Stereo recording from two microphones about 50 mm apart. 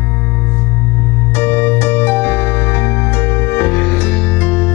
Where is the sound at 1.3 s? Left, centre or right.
Left.